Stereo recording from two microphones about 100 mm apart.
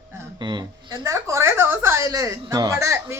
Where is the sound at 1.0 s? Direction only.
30° right (ahead or behind).